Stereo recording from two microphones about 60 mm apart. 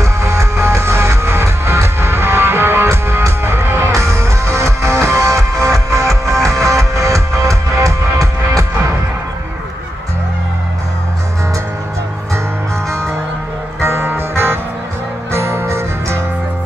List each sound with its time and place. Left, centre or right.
0.0 s music: right
3.9 s music: right
13.7 s music: right